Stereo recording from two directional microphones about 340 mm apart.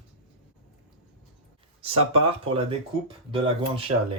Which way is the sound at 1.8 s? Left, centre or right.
Centre.